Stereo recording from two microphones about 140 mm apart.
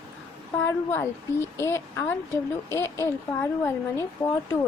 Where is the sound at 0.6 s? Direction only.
20° left (ahead or behind).